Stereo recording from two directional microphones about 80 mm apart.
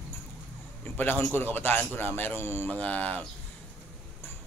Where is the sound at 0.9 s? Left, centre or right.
Left.